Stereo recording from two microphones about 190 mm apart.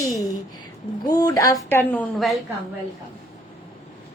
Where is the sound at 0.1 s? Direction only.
15° left (ahead or behind).